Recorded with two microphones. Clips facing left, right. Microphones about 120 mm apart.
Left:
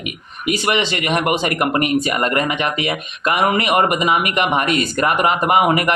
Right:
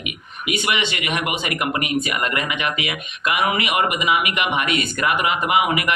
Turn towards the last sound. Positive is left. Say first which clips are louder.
# left 4 dB
turn(degrees=45)  # may be behind; listen again after turning